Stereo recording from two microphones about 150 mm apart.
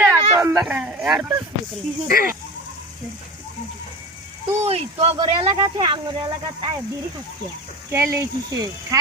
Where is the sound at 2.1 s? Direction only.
75° left (ahead or behind).